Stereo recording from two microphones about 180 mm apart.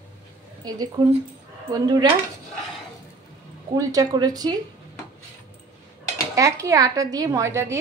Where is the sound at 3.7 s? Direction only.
20° right (ahead or behind).